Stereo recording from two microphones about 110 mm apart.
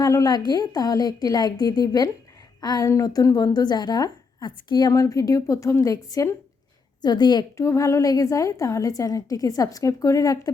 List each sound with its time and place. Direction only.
0.0 s a woman's voice: 30° left (ahead or behind)
4.9 s a woman's voice: 30° left (ahead or behind)
7.5 s a woman's voice: 25° left (ahead or behind)